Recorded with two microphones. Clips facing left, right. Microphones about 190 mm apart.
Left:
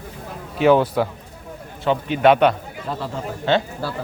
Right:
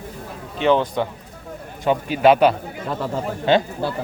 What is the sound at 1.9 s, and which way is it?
Speech, 5° right (ahead or behind).